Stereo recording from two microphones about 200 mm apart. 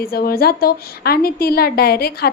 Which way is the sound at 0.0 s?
50° left (ahead or behind).